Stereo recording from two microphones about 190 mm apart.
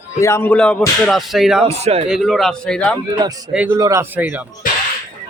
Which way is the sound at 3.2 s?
20° right (ahead or behind).